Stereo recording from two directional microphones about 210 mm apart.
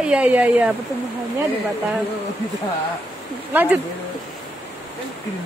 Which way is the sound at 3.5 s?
10° right (ahead or behind).